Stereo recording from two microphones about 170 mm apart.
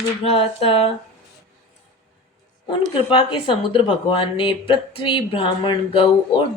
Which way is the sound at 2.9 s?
30° left (ahead or behind).